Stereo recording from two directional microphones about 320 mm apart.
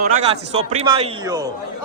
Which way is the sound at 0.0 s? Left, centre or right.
Centre.